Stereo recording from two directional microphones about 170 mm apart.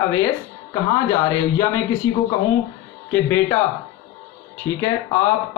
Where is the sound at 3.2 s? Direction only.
10° left (ahead or behind).